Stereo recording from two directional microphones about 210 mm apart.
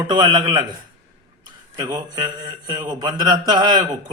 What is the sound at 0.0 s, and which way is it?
Speech, 20° right (ahead or behind).